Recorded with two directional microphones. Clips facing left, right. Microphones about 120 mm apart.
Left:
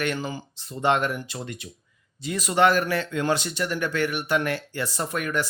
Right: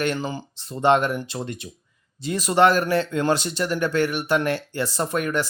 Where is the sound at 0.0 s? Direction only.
30° right (ahead or behind).